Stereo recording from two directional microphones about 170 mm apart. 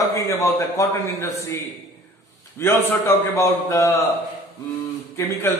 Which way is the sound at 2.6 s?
15° left (ahead or behind).